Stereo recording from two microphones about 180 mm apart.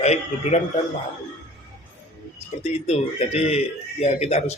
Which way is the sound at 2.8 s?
35° left (ahead or behind).